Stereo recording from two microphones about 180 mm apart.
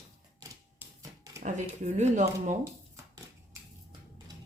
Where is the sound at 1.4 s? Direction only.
40° right (ahead or behind).